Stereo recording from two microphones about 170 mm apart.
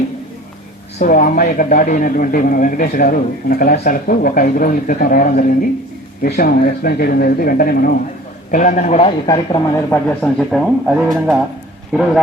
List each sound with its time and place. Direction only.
0.9 s a man's voice: 55° left (ahead or behind)
8.4 s a man's voice: 50° left (ahead or behind)
9.2 s speech: 25° left (ahead or behind)
10.1 s speech: 10° left (ahead or behind)
10.8 s speech: 5° right (ahead or behind)